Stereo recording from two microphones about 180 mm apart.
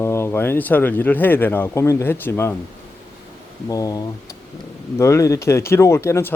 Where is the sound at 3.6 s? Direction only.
20° left (ahead or behind).